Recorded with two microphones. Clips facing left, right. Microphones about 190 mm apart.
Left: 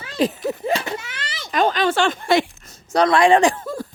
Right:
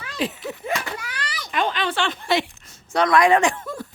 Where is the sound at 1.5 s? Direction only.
40° left (ahead or behind).